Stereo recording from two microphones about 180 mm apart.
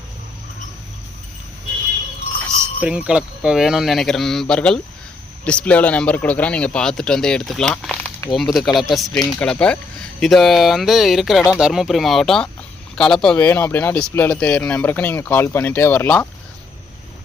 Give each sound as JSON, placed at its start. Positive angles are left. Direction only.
{"t": 2.8, "sound": "speech", "side_deg": -5}